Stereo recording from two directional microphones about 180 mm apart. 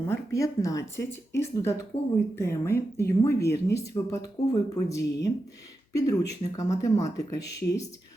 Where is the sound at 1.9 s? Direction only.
30° left (ahead or behind).